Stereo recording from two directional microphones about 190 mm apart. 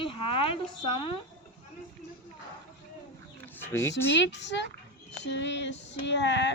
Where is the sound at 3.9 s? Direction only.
70° left (ahead or behind).